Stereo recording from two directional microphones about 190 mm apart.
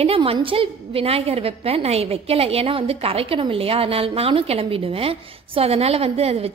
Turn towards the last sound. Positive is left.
turn(degrees=-30)  # may be behind; listen again after turning